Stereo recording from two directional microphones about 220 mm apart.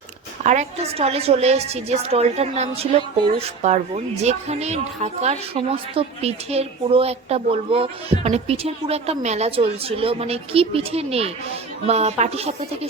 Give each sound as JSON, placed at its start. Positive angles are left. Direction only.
{"t": 0.4, "sound": "a woman's voice", "side_deg": -30}